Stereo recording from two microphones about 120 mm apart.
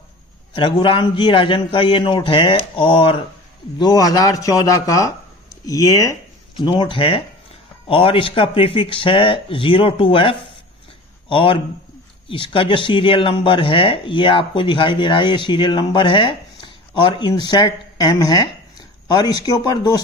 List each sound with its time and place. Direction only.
0.6 s speech: 40° left (ahead or behind)
3.7 s speech: 35° left (ahead or behind)
6.6 s speech: 40° left (ahead or behind)